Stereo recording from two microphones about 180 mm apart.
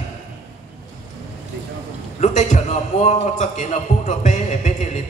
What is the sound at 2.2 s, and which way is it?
A man's voice, 40° left (ahead or behind).